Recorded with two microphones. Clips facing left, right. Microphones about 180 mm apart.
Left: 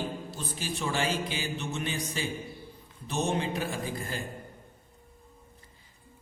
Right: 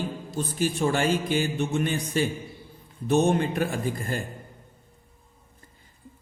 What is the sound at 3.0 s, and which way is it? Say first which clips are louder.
Speech: right 8 dB; 55° right (ahead or behind).